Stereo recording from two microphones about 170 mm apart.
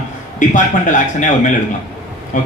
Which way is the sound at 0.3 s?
50° left (ahead or behind).